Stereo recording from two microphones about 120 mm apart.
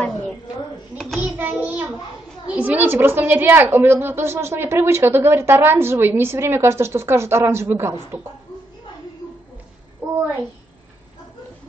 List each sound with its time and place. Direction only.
0.9 s a child's voice: 5° left (ahead or behind)
1.4 s child singing: 15° right (ahead or behind)
2.5 s a woman's voice: 15° right (ahead or behind)
10.0 s a sound: 20° right (ahead or behind)